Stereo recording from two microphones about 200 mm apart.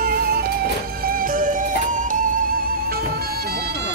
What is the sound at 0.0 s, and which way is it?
Music, 50° right (ahead or behind).